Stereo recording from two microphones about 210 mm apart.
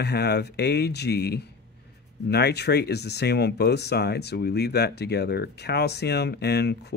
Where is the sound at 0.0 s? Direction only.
50° left (ahead or behind).